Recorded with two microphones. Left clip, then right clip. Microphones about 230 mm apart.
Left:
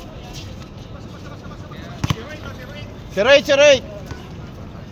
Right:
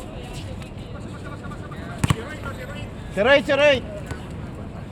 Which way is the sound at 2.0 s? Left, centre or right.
Right.